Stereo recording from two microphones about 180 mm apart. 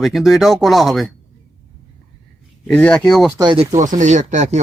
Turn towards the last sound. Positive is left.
turn(degrees=-40)  # may be behind; listen again after turning